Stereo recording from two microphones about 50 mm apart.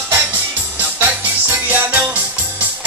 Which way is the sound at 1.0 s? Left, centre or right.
Right.